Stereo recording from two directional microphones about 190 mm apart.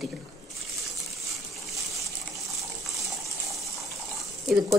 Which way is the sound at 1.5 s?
Centre (ahead or behind).